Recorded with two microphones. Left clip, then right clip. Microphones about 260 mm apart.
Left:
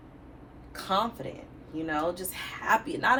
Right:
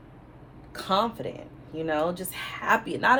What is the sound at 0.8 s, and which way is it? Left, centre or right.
A woman's voice, right.